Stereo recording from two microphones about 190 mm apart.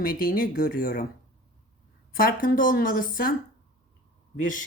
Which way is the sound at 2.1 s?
50° left (ahead or behind).